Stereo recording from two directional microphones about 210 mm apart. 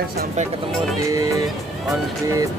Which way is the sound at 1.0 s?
15° right (ahead or behind).